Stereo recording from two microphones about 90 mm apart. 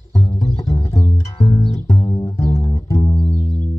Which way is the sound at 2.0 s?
55° left (ahead or behind).